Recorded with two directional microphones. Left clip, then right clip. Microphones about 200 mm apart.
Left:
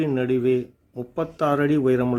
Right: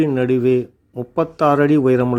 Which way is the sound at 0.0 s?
25° right (ahead or behind).